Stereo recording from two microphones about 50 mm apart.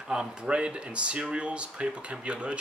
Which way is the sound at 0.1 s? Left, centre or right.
Centre.